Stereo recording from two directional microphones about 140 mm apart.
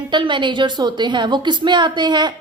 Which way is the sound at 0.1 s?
35° right (ahead or behind).